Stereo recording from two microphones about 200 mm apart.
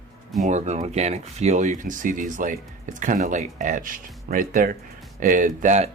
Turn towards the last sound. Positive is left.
turn(degrees=-35)  # may be behind; listen again after turning